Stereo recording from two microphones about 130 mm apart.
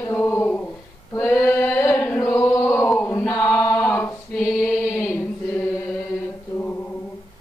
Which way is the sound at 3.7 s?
10° left (ahead or behind).